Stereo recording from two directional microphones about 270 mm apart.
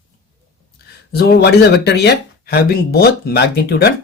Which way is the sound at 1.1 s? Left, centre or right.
Left.